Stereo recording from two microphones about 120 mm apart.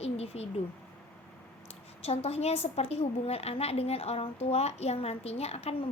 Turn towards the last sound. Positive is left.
turn(degrees=60)  # may be behind; listen again after turning